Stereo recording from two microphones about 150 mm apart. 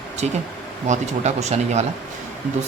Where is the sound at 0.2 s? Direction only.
50° right (ahead or behind).